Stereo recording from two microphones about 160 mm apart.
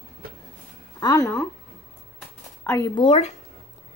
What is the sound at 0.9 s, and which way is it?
Speech, 20° left (ahead or behind).